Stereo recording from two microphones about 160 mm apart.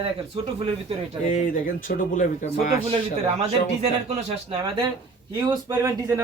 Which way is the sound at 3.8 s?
40° right (ahead or behind).